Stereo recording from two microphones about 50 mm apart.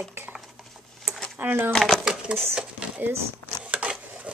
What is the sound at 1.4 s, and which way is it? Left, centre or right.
Speech, right.